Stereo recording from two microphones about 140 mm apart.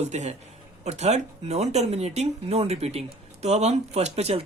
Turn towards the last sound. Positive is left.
turn(degrees=-50)  # may be behind; listen again after turning